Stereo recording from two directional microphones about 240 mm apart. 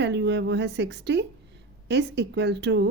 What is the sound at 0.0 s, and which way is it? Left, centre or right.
Speech, right.